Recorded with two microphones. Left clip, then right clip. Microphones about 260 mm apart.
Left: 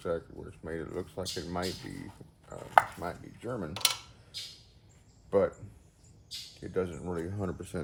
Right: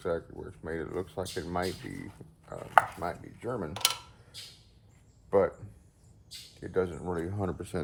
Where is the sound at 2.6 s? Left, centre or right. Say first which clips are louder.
Even; centre.